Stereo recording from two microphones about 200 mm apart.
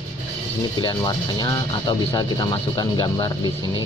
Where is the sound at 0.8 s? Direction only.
20° left (ahead or behind).